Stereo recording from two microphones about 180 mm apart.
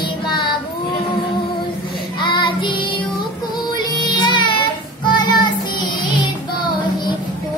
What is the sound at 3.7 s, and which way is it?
Music, 25° left (ahead or behind).